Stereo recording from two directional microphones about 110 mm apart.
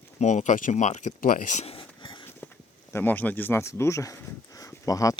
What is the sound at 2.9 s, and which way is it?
Speech, 15° left (ahead or behind).